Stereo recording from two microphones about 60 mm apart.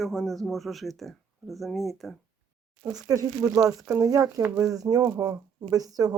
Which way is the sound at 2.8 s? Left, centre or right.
Right.